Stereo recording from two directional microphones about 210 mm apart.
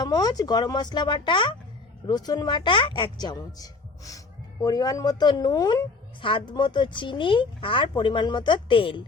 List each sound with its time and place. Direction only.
0.0 s speech: 20° left (ahead or behind)